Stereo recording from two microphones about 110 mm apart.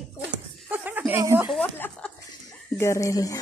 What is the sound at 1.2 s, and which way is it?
Speech, 25° right (ahead or behind).